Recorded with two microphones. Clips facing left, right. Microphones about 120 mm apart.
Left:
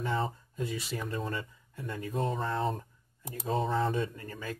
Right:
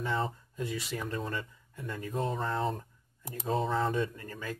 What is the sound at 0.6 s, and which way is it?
Speech, 30° left (ahead or behind).